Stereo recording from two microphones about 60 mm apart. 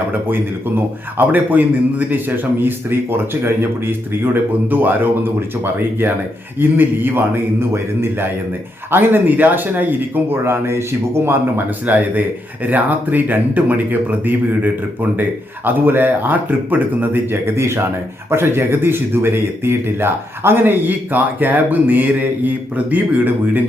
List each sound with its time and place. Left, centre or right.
1.3 s speech: right
4.7 s speech: right
6.6 s speech: right
18.3 s speech: right